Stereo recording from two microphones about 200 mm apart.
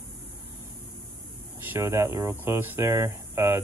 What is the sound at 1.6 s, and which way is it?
Speech, 10° right (ahead or behind).